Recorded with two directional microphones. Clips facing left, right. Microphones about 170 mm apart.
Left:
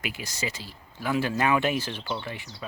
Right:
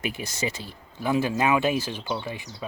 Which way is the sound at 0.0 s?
25° right (ahead or behind).